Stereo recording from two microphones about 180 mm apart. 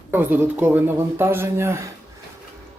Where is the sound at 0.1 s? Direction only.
10° right (ahead or behind).